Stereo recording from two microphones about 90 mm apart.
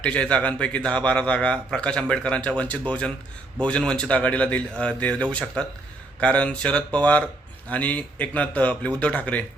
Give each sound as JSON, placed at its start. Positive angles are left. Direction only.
{"t": 0.0, "sound": "a man's voice", "side_deg": 10}